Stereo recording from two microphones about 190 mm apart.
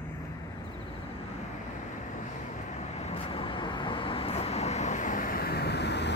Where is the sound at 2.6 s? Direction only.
35° left (ahead or behind).